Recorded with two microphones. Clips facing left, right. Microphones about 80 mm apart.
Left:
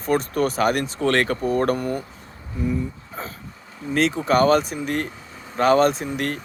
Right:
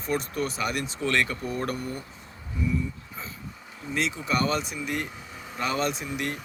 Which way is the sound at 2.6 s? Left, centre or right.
Left.